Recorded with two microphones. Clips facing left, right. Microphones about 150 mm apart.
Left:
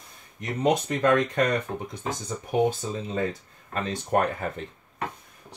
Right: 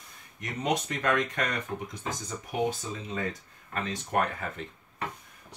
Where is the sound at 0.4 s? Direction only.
30° left (ahead or behind).